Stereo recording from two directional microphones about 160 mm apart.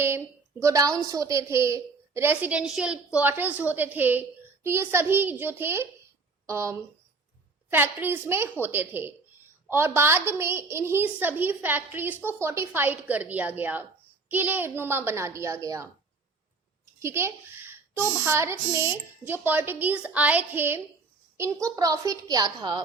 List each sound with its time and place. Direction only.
0.6 s a woman's voice: 20° right (ahead or behind)